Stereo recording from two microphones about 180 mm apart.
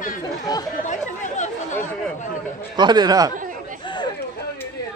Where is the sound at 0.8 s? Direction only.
40° left (ahead or behind).